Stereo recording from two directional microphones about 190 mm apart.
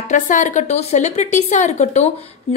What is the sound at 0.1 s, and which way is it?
Speech, 40° left (ahead or behind).